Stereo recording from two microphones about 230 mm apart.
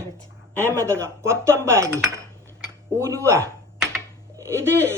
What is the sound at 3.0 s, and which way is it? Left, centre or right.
Speech, centre.